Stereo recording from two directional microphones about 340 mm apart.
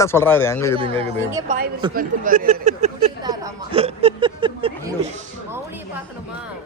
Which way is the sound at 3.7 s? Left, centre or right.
Centre.